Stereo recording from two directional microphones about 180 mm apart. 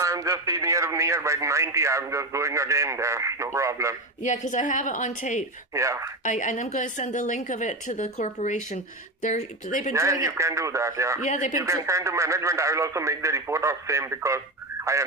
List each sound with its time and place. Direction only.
0.0 s a man's voice: 15° right (ahead or behind)
4.2 s a woman's voice: 45° left (ahead or behind)
5.7 s a man's voice: 15° right (ahead or behind)
6.2 s a woman's voice: 45° left (ahead or behind)
9.9 s a man's voice: 15° right (ahead or behind)
11.2 s a woman's voice: 40° left (ahead or behind)
11.5 s a man's voice: 15° right (ahead or behind)